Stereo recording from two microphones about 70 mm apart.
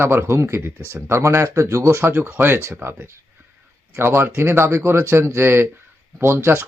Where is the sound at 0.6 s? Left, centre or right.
Right.